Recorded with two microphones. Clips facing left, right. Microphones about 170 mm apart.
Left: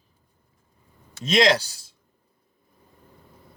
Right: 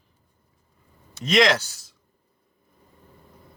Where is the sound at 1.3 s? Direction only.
30° left (ahead or behind).